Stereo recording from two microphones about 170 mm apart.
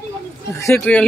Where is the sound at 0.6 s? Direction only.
10° left (ahead or behind).